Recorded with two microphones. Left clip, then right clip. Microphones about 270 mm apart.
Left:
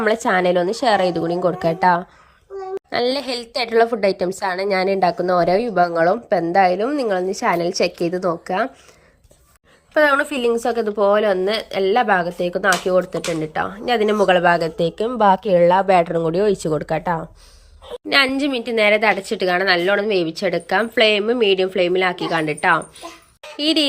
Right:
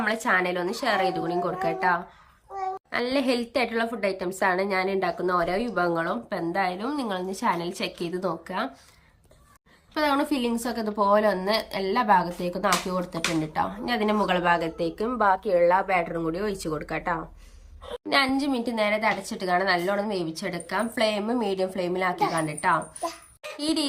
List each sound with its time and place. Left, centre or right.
0.0 s a woman's voice: left
9.9 s a woman's voice: centre
18.4 s a woman's voice: centre